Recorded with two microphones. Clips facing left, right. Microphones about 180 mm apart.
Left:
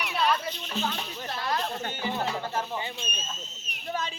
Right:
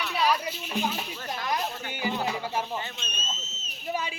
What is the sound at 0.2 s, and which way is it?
Children playing, 5° right (ahead or behind).